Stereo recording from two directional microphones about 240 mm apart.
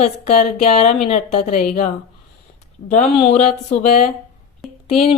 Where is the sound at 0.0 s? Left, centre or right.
Left.